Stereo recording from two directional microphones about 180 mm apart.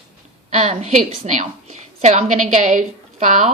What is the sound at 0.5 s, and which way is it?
A woman's voice, 40° right (ahead or behind).